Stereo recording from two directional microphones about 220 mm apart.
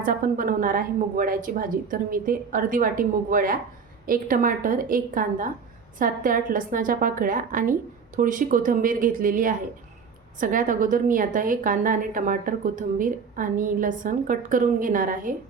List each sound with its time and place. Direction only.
0.0 s a woman's voice: 40° right (ahead or behind)